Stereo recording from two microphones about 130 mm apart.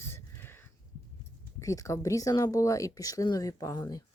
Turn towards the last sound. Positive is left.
turn(degrees=30)  # may be behind; listen again after turning